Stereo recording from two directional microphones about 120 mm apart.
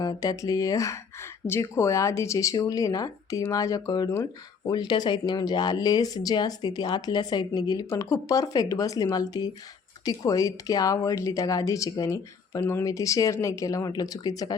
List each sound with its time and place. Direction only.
0.0 s a woman's voice: 30° left (ahead or behind)